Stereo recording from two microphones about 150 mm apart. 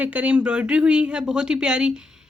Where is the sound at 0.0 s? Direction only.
10° right (ahead or behind).